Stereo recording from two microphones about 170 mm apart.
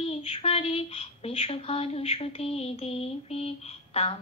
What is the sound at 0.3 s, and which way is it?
Speech, 35° left (ahead or behind).